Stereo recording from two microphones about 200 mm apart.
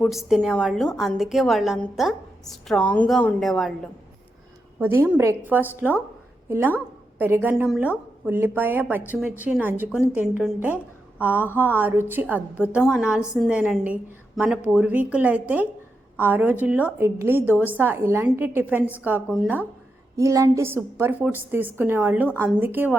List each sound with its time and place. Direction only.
0.0 s a woman's voice: centre (ahead or behind)
4.8 s a woman's voice: 10° right (ahead or behind)
11.3 s a sound: 10° left (ahead or behind)
11.7 s a woman's voice: 10° right (ahead or behind)
17.5 s a sound: 10° left (ahead or behind)
17.7 s a woman's voice: 10° right (ahead or behind)
18.8 s a sound: 10° left (ahead or behind)
19.0 s a woman's voice: 5° right (ahead or behind)
20.1 s a woman's voice: 15° right (ahead or behind)